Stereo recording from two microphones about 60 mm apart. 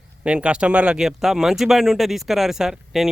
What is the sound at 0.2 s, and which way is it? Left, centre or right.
Speech, centre.